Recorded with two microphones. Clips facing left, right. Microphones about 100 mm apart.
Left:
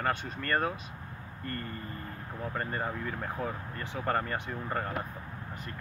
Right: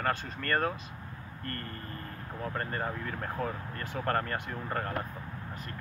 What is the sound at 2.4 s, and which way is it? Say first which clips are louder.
Speech: even; 10° left (ahead or behind).